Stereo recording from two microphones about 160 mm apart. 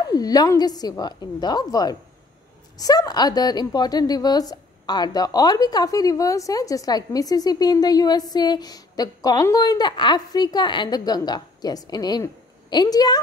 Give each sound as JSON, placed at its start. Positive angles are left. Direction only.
{"t": 0.1, "sound": "a woman's voice", "side_deg": 25}